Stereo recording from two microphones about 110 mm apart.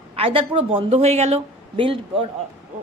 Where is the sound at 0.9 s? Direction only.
80° right; by 2.3 s 55° right (ahead or behind).